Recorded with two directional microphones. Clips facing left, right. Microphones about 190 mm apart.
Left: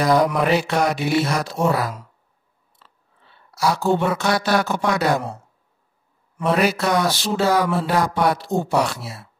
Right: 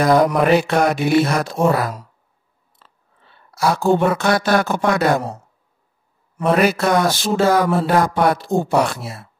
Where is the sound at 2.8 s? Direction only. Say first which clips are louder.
Right 1 dB; 50° right (ahead or behind).